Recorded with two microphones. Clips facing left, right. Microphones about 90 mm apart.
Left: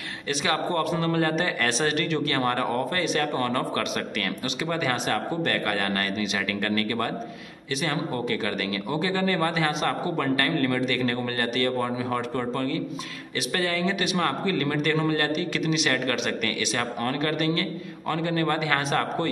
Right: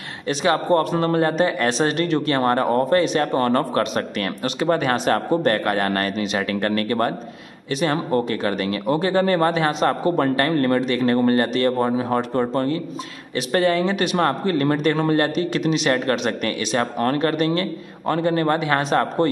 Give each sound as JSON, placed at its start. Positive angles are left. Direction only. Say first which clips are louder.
{"t": 0.3, "sound": "speech", "louder": "right 7 dB", "side_deg": -35}